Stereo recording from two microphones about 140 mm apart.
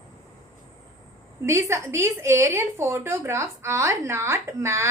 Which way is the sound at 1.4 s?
20° right (ahead or behind).